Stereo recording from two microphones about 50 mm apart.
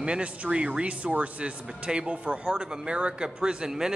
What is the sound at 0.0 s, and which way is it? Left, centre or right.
Speech, right.